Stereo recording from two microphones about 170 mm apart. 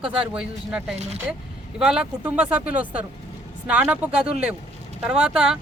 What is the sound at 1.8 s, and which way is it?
Speech, 5° right (ahead or behind).